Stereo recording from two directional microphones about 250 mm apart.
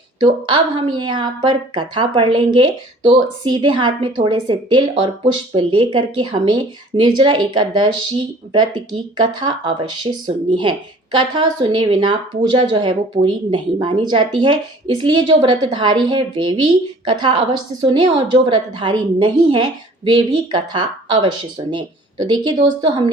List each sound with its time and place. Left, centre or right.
0.4 s speech: centre